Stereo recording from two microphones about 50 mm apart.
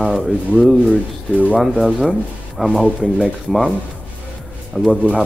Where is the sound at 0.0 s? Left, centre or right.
Centre.